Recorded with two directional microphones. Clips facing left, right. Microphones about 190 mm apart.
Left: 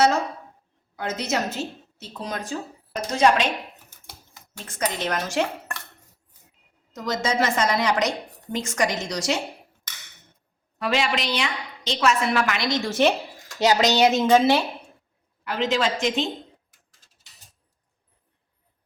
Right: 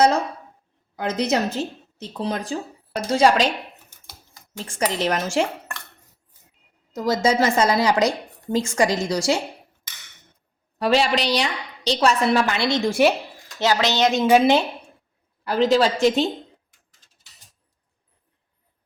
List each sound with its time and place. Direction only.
1.0 s a woman's voice: 35° right (ahead or behind)
4.5 s speech: 30° right (ahead or behind)
6.9 s a woman's voice: 30° right (ahead or behind)
10.8 s a woman's voice: 35° right (ahead or behind)
12.9 s a woman's voice: 10° right (ahead or behind)
13.6 s speech: 15° left (ahead or behind)
14.3 s a woman's voice: 15° right (ahead or behind)
15.4 s a woman's voice: 35° right (ahead or behind)